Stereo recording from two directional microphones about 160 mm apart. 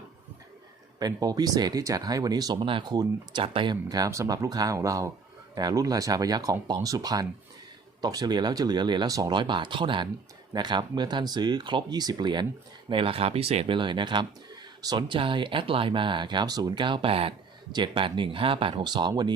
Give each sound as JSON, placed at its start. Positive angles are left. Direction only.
{"t": 0.9, "sound": "speech", "side_deg": -25}